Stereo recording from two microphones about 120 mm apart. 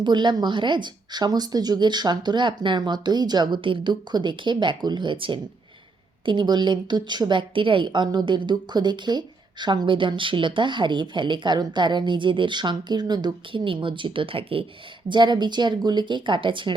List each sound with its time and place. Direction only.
0.0 s a woman's voice: 40° right (ahead or behind)
15.1 s a woman's voice: 40° right (ahead or behind)